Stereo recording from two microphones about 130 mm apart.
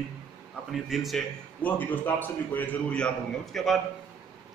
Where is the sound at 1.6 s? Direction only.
15° left (ahead or behind).